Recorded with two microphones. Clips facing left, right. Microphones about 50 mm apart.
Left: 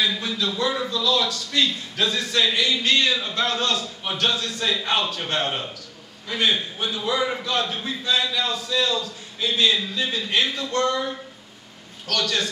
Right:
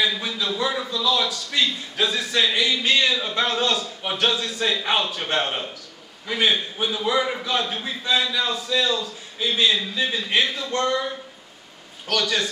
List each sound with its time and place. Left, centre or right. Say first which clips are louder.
0.0 s a man's voice: even; centre